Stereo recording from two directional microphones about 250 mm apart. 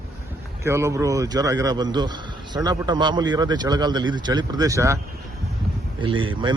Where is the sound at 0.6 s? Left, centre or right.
Centre.